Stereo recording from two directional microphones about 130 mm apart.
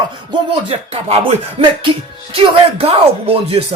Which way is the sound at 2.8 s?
50° right (ahead or behind).